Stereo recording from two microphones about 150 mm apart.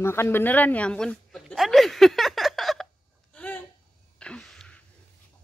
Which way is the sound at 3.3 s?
10° left (ahead or behind).